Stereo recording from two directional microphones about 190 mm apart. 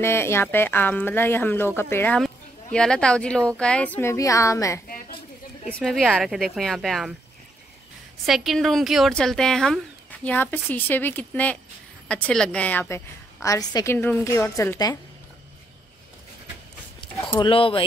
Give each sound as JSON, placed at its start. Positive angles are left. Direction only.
{"t": 0.0, "sound": "a woman's voice", "side_deg": 15}
{"t": 4.8, "sound": "a sound", "side_deg": 50}
{"t": 5.7, "sound": "speech", "side_deg": 5}
{"t": 8.3, "sound": "a woman's voice", "side_deg": 0}
{"t": 17.4, "sound": "speech", "side_deg": 30}